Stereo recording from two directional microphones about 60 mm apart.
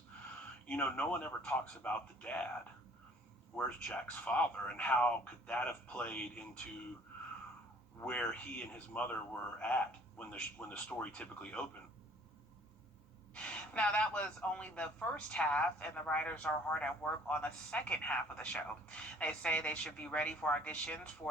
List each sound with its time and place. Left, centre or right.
0.7 s speech: left
3.5 s speech: centre
8.0 s speech: left
13.3 s speech: centre